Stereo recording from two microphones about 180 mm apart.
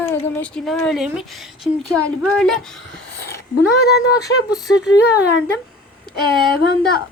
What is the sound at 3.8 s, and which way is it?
Speech, 65° left (ahead or behind).